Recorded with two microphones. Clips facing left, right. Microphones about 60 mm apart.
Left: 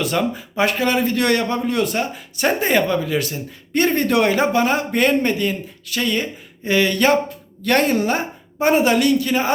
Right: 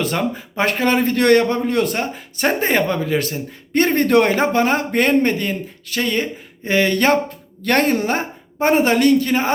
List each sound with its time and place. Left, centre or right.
0.0 s a man's voice: right